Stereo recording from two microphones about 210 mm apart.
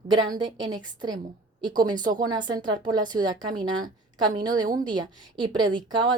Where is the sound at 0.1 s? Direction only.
20° right (ahead or behind).